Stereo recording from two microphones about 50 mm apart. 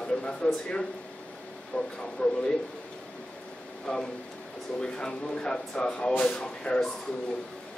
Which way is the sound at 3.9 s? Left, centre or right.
Centre.